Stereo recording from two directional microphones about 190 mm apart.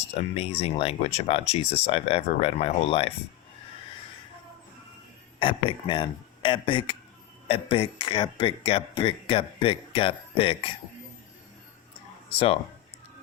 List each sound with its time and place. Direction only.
0.1 s speech: 30° left (ahead or behind)
5.4 s speech: 25° left (ahead or behind)